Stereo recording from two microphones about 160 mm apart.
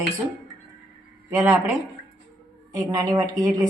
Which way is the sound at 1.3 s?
20° right (ahead or behind).